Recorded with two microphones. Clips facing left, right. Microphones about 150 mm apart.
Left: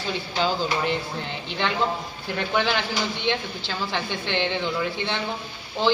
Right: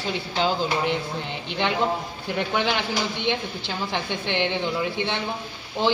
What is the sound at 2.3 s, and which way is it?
A woman's voice, 15° right (ahead or behind).